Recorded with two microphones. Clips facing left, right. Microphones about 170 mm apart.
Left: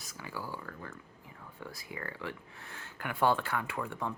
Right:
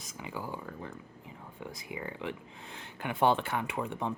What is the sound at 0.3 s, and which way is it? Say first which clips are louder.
Speech: right 2 dB; 20° right (ahead or behind).